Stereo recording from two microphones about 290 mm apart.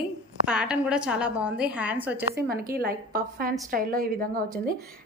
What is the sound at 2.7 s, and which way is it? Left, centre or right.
A woman's voice, right.